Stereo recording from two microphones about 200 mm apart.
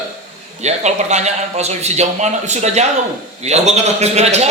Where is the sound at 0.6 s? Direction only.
35° right (ahead or behind).